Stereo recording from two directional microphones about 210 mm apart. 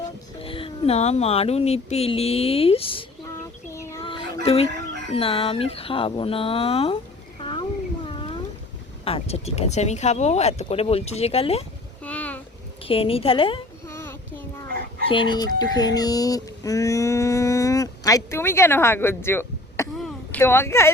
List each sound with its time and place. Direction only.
0.3 s speech: 25° left (ahead or behind)
3.2 s child singing: 15° left (ahead or behind)
4.0 s a sound: 25° left (ahead or behind)
4.4 s a woman's voice: 30° left (ahead or behind)
9.0 s speech: 30° left (ahead or behind)
12.0 s a sound: 5° left (ahead or behind)
12.8 s a woman's voice: 25° left (ahead or behind)
13.8 s child singing: 10° left (ahead or behind)
15.1 s speech: 20° left (ahead or behind)
20.0 s a sound: 10° left (ahead or behind)